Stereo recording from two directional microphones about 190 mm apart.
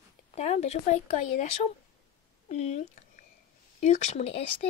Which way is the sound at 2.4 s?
35° left (ahead or behind).